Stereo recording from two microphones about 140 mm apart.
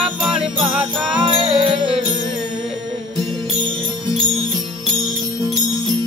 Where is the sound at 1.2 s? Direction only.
40° right (ahead or behind).